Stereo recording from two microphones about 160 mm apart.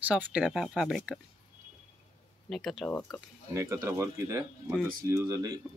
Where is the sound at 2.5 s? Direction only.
Centre (ahead or behind).